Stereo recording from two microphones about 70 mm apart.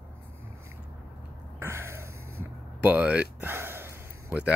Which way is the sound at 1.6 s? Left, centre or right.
Right.